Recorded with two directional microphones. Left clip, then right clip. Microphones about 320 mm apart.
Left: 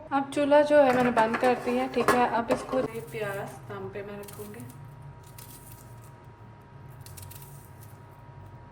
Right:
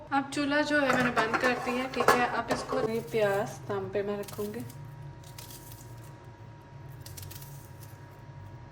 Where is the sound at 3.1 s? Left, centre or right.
Centre.